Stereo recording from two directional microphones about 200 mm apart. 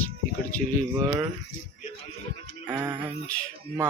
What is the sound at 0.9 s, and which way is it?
Groan, 15° right (ahead or behind).